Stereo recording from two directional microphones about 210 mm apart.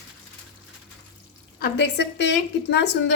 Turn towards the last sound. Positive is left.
turn(degrees=55)  # may be behind; listen again after turning